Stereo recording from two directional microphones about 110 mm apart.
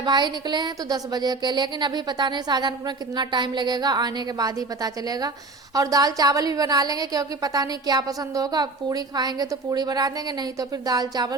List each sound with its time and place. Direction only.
0.0 s a woman's voice: 45° right (ahead or behind)